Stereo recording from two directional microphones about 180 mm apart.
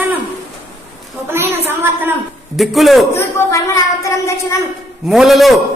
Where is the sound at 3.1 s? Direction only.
15° left (ahead or behind).